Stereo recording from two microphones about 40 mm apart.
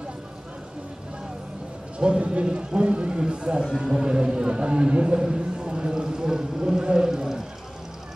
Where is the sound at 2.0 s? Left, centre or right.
Right.